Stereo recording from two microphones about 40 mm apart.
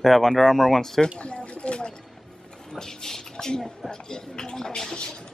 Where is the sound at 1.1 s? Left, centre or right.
Left.